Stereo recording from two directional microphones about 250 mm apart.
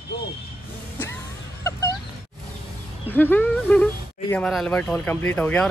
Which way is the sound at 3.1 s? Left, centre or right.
Centre.